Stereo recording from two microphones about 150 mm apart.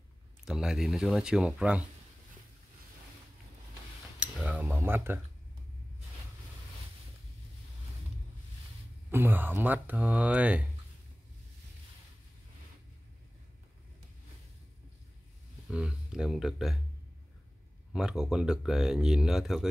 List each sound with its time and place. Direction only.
0.5 s speech: 5° right (ahead or behind)
4.2 s cutlery: 10° right (ahead or behind)
9.1 s speech: 15° right (ahead or behind)
15.7 s speech: 5° right (ahead or behind)
17.9 s speech: 5° right (ahead or behind)